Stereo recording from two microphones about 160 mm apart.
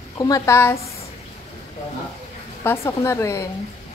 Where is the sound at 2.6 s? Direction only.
15° left (ahead or behind).